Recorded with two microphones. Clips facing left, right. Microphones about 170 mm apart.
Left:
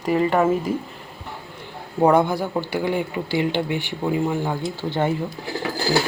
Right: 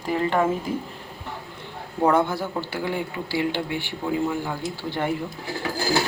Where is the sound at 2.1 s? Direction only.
15° left (ahead or behind).